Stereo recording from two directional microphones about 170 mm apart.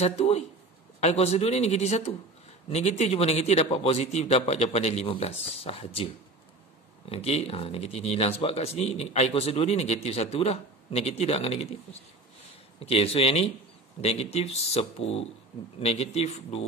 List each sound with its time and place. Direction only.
0.0 s speech: 40° left (ahead or behind)
7.1 s speech: 35° left (ahead or behind)